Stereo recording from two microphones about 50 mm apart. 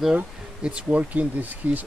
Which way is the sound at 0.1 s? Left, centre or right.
Right.